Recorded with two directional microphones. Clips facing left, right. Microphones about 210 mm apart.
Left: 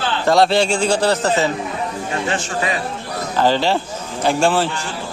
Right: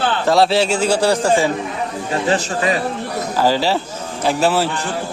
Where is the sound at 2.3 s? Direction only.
35° right (ahead or behind).